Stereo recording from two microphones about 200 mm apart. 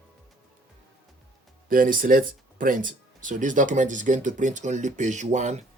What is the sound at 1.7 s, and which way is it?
Speech, 45° right (ahead or behind).